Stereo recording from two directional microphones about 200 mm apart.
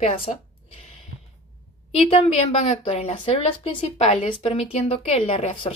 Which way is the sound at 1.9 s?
30° left (ahead or behind).